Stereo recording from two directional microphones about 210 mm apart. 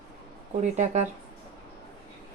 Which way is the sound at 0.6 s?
35° right (ahead or behind).